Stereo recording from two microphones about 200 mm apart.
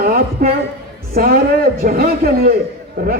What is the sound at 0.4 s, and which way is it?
A man's voice, 50° right (ahead or behind).